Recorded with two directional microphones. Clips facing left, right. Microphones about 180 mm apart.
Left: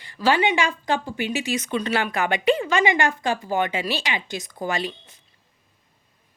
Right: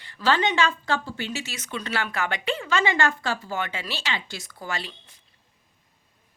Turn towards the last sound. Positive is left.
turn(degrees=20)  # may be behind; listen again after turning